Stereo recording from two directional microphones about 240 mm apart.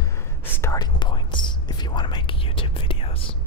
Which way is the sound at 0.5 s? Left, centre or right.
Centre.